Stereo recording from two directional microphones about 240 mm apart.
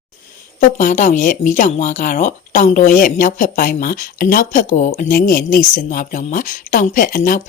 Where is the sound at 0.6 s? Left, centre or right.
Left.